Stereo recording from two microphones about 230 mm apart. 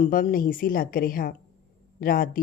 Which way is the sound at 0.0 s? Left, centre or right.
Left.